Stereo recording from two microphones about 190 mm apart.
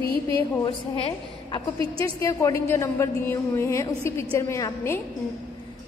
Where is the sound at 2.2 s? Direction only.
15° left (ahead or behind).